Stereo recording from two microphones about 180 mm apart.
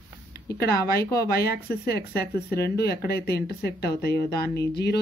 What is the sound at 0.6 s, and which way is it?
Speech, 60° left (ahead or behind).